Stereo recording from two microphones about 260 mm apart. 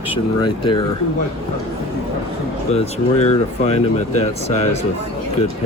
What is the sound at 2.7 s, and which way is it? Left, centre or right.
Speech, left.